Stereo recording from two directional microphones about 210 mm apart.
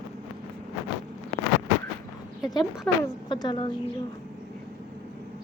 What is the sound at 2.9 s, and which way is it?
Speech, 5° left (ahead or behind).